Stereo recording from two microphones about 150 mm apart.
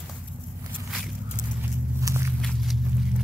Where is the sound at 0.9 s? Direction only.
5° right (ahead or behind).